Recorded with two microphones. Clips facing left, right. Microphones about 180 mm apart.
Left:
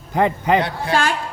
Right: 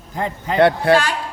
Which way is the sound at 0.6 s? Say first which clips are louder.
Right 8 dB; 65° right (ahead or behind).